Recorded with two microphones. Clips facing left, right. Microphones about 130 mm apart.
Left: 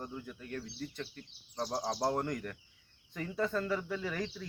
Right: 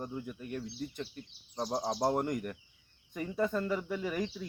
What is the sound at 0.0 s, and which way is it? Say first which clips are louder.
Speech: right 4 dB; 15° right (ahead or behind).